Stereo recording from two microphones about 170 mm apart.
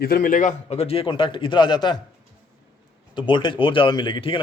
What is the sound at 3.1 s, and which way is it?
Speech, 30° left (ahead or behind).